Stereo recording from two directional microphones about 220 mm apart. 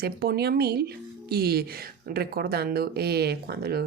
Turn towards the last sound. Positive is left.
turn(degrees=-45)  # may be behind; listen again after turning